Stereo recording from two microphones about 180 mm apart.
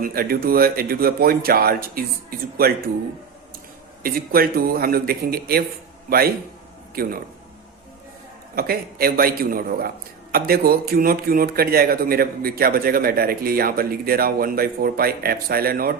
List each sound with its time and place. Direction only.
0.0 s a man's voice: 55° right (ahead or behind)
4.0 s a man's voice: 55° right (ahead or behind)
8.5 s a man's voice: 55° right (ahead or behind)